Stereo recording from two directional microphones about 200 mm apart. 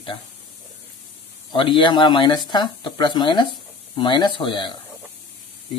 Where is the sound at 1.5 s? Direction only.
25° left (ahead or behind).